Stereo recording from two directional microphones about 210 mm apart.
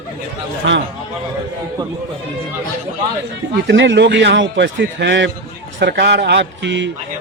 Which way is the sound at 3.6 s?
55° right (ahead or behind).